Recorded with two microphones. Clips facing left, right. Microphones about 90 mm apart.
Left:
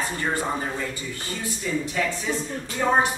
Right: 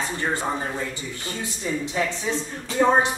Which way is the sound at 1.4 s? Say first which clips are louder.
Left 1 dB; 25° right (ahead or behind).